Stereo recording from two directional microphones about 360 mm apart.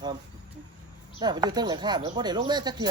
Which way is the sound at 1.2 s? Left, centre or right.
Centre.